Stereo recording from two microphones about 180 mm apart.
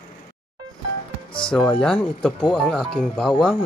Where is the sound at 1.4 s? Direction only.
5° left (ahead or behind).